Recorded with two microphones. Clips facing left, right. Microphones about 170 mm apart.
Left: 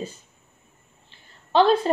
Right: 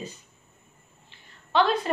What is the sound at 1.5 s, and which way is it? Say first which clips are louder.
Speech: left 5 dB; 30° left (ahead or behind).